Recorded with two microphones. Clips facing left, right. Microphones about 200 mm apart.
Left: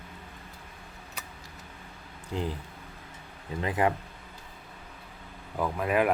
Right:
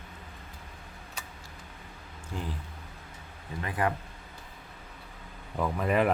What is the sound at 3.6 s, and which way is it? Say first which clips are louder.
Speech: left 4 dB; 20° left (ahead or behind).